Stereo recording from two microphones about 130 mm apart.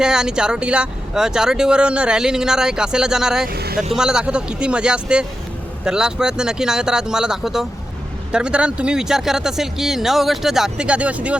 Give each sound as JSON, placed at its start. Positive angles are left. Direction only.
{"t": 0.0, "sound": "speech", "side_deg": -5}